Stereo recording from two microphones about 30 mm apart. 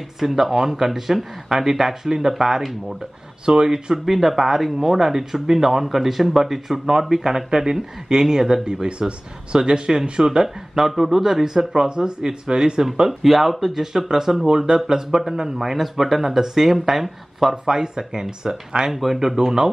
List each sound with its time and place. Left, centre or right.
0.2 s speech: centre
3.4 s speech: right
4.0 s speech: centre
8.8 s speech: right
10.8 s speech: centre
11.4 s speech: right
13.2 s speech: centre
17.6 s speech: right
18.9 s speech: centre